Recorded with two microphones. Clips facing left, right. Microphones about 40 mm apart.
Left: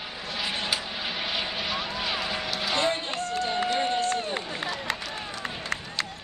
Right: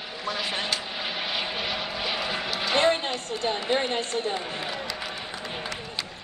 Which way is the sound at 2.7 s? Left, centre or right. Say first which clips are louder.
Right 5 dB; right.